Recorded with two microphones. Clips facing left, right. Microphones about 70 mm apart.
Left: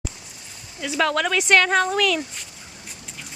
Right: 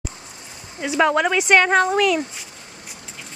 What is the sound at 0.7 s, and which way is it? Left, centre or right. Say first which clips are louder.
Speech: right 4 dB; right.